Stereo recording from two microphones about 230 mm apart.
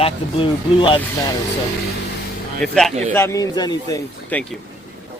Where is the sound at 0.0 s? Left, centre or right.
Left.